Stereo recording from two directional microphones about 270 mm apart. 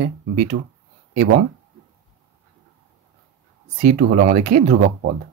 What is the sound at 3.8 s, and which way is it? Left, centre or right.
Speech, right.